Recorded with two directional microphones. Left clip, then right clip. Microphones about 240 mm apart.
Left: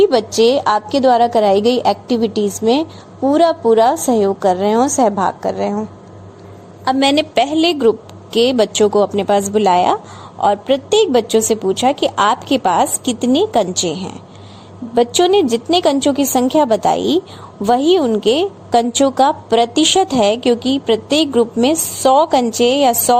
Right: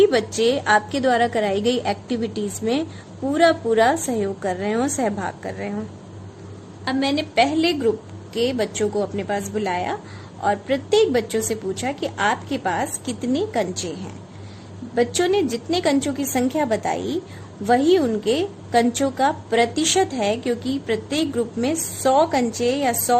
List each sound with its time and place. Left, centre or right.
0.0 s a woman's voice: centre
6.8 s a woman's voice: left